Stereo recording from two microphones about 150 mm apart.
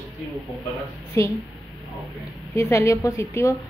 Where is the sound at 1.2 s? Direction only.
20° left (ahead or behind).